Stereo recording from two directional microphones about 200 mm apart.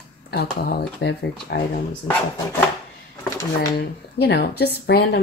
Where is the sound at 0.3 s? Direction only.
55° left (ahead or behind).